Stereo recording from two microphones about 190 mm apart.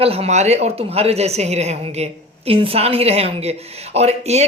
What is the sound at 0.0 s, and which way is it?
Speech, 30° right (ahead or behind).